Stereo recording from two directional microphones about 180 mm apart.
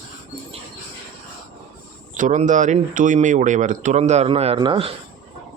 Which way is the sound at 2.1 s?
45° right (ahead or behind).